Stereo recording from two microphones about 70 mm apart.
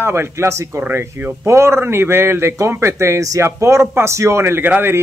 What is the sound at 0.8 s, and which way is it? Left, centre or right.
A man's voice, right.